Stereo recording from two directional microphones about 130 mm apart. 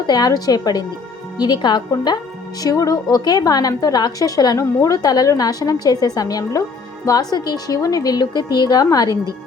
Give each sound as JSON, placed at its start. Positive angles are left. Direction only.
{"t": 0.1, "sound": "a woman's voice", "side_deg": 30}